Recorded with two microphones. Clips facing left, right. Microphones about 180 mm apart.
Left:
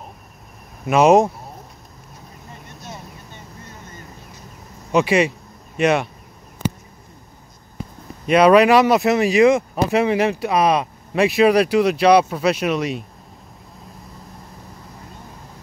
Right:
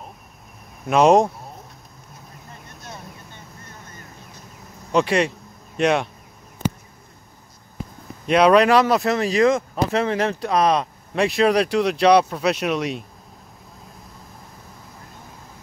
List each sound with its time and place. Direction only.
0.8 s speech: 5° left (ahead or behind)
2.6 s vehicle: centre (ahead or behind)
4.9 s speech: 5° left (ahead or behind)
6.6 s a sound: centre (ahead or behind)
8.3 s speech: 5° left (ahead or behind)